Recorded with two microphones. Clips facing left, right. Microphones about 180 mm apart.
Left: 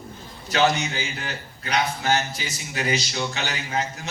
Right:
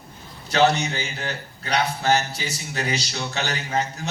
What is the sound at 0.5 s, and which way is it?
A man's voice, 35° right (ahead or behind).